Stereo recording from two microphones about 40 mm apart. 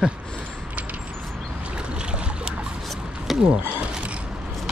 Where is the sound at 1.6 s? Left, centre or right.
Right.